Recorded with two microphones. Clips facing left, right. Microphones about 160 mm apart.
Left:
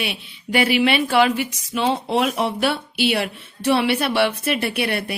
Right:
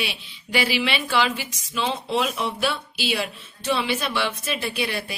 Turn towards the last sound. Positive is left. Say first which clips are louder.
# left 4 dB
turn(degrees=65)  # may be behind; listen again after turning